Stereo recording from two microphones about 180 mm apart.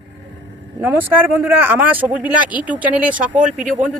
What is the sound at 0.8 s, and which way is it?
Speech, 10° right (ahead or behind).